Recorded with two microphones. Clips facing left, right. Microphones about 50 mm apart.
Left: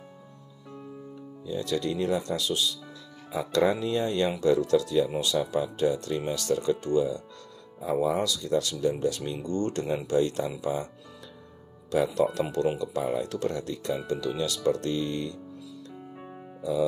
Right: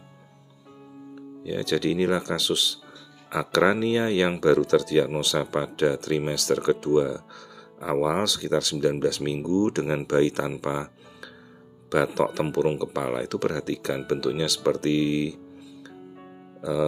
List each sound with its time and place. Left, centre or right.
1.4 s speech: right
3.3 s speech: right
5.2 s speech: right
11.9 s speech: right
12.4 s speech: right